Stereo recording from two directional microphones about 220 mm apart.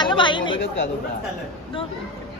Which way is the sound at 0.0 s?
20° left (ahead or behind).